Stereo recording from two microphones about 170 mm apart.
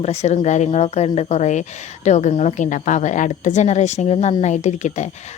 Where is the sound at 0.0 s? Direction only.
40° left (ahead or behind).